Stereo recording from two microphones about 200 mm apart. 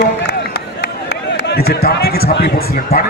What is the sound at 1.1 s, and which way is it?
Speech, 60° left (ahead or behind).